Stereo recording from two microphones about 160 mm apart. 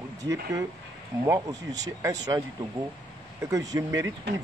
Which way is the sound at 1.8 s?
25° right (ahead or behind).